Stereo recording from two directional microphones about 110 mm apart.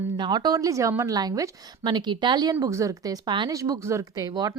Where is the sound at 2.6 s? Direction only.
30° right (ahead or behind).